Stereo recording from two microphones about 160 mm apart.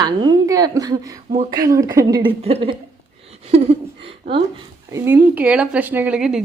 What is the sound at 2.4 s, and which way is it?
Speech, 35° right (ahead or behind).